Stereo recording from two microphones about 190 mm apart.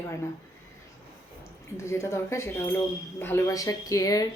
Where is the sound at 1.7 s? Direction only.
15° left (ahead or behind).